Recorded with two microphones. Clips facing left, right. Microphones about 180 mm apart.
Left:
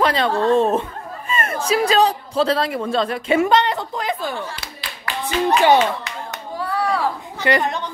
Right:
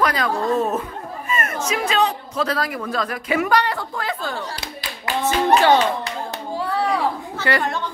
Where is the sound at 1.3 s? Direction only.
30° left (ahead or behind).